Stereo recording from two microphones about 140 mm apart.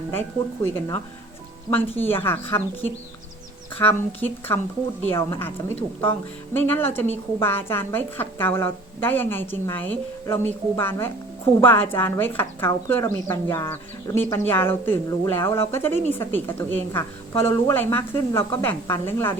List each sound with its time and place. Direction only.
0.1 s speech: 15° left (ahead or behind)
1.7 s speech: 15° left (ahead or behind)
3.8 s speech: 15° left (ahead or behind)